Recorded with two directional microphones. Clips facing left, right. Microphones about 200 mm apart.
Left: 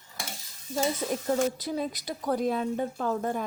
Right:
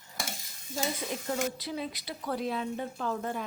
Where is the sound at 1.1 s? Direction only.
45° left (ahead or behind).